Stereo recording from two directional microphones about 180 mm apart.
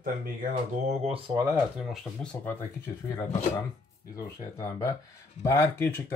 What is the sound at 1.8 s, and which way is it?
Speech, centre (ahead or behind).